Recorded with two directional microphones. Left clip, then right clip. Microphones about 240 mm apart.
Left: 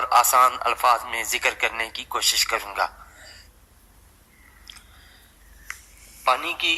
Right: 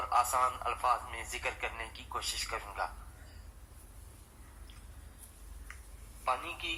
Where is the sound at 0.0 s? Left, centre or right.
Left.